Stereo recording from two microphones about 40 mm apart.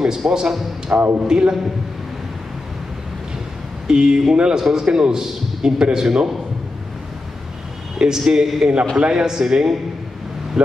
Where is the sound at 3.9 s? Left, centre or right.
Centre.